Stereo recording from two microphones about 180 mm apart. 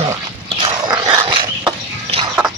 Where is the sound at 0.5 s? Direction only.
25° right (ahead or behind).